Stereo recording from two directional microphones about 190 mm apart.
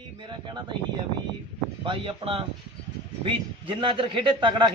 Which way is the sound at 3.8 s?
25° right (ahead or behind).